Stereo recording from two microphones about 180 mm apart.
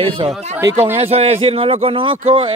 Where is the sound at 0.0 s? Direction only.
30° right (ahead or behind).